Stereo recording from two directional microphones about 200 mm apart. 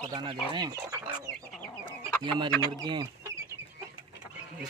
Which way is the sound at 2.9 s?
20° right (ahead or behind).